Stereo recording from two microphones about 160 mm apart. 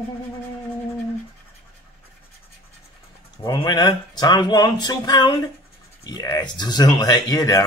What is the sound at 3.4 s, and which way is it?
Speech, 30° left (ahead or behind).